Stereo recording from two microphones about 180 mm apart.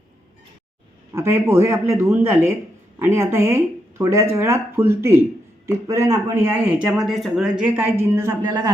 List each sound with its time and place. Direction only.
1.1 s speech: 15° right (ahead or behind)
8.1 s speech: 20° right (ahead or behind)